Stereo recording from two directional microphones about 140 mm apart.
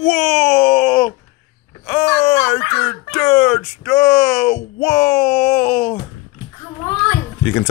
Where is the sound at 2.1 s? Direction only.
25° left (ahead or behind).